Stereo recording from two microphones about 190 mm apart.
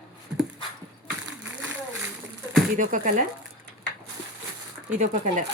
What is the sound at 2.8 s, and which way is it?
Speech, 45° right (ahead or behind).